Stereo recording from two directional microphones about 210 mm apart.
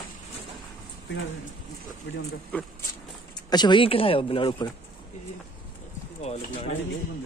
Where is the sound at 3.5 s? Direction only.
20° left (ahead or behind).